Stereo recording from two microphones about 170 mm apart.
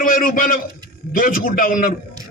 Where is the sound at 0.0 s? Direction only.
55° left (ahead or behind).